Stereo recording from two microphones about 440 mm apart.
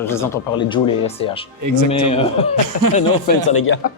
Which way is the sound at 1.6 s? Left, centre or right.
Right.